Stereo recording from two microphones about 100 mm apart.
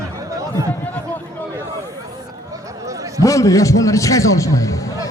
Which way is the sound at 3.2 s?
30° left (ahead or behind).